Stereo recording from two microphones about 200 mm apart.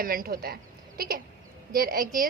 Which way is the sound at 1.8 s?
45° right (ahead or behind).